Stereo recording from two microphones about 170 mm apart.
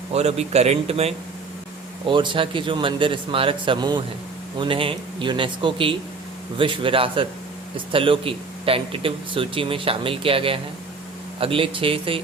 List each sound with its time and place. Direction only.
0.1 s a man's voice: 40° right (ahead or behind)